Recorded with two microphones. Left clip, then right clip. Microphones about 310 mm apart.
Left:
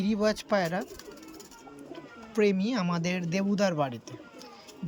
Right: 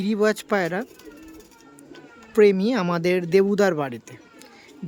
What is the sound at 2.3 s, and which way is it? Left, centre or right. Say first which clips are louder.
Speech: right 9 dB; centre.